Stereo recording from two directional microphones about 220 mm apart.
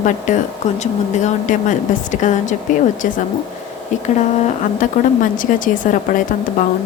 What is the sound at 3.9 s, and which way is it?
Speech, 35° left (ahead or behind).